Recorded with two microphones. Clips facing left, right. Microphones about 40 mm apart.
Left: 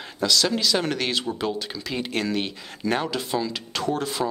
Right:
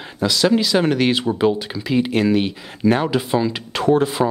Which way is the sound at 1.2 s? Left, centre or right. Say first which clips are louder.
Right 9 dB; right.